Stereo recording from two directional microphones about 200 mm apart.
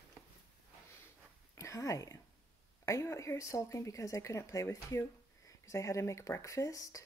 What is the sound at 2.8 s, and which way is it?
A woman's voice, 15° left (ahead or behind).